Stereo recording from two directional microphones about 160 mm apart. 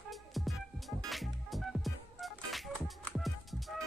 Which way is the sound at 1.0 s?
Centre (ahead or behind).